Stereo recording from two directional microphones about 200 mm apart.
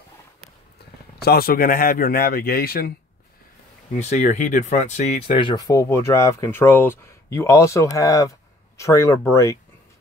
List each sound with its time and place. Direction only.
1.2 s a man's voice: 50° left (ahead or behind)
3.9 s speech: 35° left (ahead or behind); by 9.6 s 15° left (ahead or behind)